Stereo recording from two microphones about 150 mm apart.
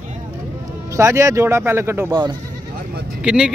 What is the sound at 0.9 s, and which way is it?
Speech, 20° right (ahead or behind).